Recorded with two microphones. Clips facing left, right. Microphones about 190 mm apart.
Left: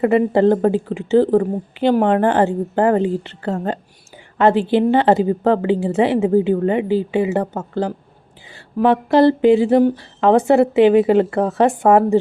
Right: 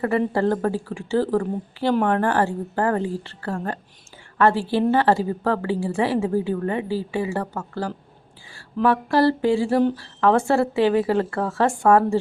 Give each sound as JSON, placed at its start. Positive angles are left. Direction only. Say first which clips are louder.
{"t": 0.0, "sound": "a woman's voice", "louder": "left 7 dB", "side_deg": 20}